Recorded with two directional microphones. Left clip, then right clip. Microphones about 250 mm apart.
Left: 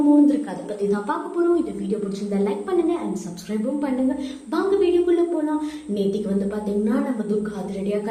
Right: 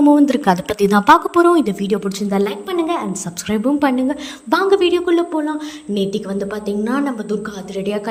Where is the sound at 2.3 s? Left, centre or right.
Right.